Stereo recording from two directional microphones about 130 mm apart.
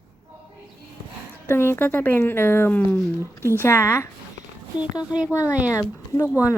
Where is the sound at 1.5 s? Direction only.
20° left (ahead or behind).